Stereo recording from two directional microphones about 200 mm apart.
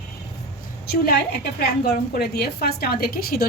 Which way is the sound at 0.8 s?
50° left (ahead or behind).